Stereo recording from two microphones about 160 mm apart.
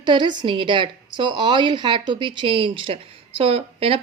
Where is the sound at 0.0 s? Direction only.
30° right (ahead or behind).